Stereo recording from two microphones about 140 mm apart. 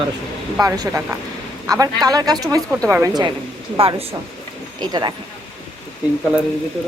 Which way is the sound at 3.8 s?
40° right (ahead or behind).